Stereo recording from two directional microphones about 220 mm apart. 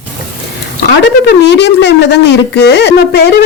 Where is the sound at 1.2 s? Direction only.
50° left (ahead or behind).